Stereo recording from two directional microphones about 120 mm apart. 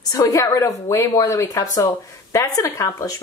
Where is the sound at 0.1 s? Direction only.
30° left (ahead or behind).